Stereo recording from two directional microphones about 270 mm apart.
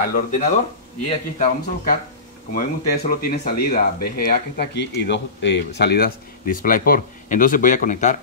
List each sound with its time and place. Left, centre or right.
0.0 s speech: left